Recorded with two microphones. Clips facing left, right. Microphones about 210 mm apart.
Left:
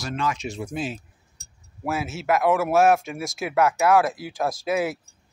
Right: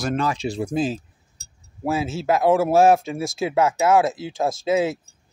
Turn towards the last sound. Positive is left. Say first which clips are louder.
# right 4 dB
turn(degrees=-25)  # may be behind; listen again after turning